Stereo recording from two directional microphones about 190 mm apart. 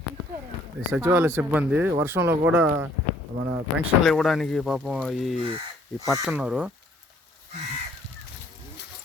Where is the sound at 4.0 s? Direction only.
Centre (ahead or behind).